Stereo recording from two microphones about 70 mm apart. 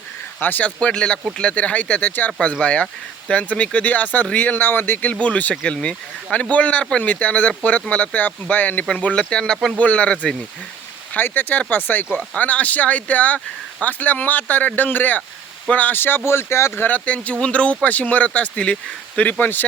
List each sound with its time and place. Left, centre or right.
0.3 s speech: left
16.9 s speech: centre